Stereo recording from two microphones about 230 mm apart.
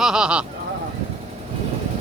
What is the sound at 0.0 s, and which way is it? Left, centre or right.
Speech, centre.